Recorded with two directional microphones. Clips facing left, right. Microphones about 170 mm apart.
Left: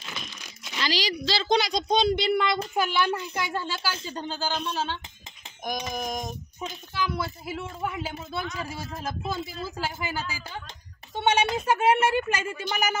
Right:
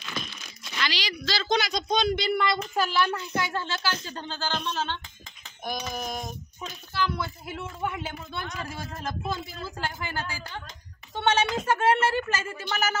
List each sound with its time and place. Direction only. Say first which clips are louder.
0.8 s speech: left 5 dB; 40° left (ahead or behind)
1.4 s speech: left 2 dB; 30° left (ahead or behind); by 12.9 s 15° left (ahead or behind)